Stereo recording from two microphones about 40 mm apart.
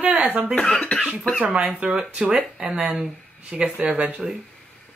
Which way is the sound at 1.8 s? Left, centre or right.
Right.